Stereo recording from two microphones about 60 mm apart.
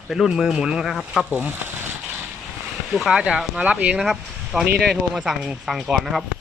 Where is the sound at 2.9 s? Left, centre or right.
Centre.